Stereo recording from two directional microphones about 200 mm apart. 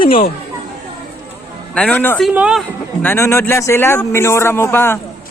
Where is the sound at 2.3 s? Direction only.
5° right (ahead or behind).